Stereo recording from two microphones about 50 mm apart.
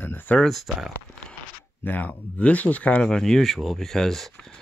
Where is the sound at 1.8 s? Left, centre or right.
Left.